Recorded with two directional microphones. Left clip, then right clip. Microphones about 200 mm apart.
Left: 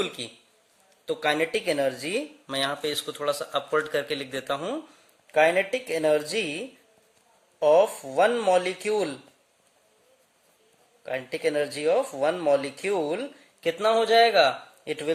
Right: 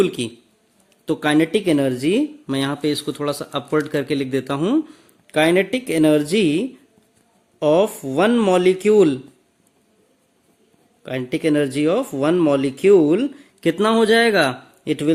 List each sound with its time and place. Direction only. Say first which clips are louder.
1.0 s speech: right 7 dB; 30° right (ahead or behind)
11.0 s speech: right 6 dB; 30° right (ahead or behind)